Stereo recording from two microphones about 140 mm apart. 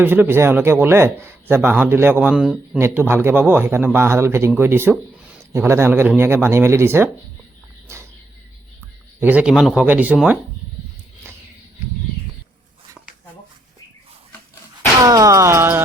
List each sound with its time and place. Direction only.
0.0 s speech: 15° right (ahead or behind)
9.2 s speech: 10° right (ahead or behind)
15.0 s music: 25° right (ahead or behind)